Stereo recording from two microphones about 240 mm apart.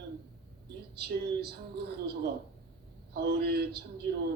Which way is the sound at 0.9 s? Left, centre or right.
Right.